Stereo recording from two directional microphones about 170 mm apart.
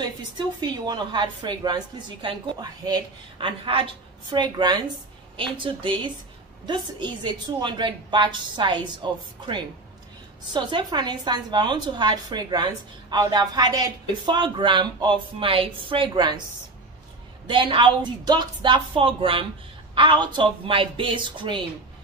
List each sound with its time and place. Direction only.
0.4 s a woman's voice: 25° right (ahead or behind)
10.5 s a woman's voice: 25° right (ahead or behind)
17.5 s a woman's voice: 30° right (ahead or behind)